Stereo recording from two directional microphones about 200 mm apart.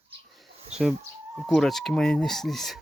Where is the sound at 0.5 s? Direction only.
30° right (ahead or behind).